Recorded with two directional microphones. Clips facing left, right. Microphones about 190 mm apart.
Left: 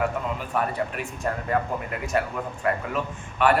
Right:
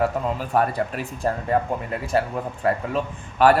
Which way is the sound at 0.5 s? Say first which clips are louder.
Right 5 dB; 35° right (ahead or behind).